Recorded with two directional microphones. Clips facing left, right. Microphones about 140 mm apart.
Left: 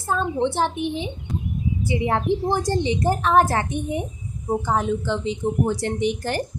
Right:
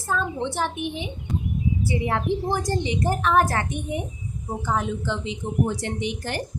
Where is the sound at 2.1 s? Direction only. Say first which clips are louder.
Left 4 dB; 25° left (ahead or behind).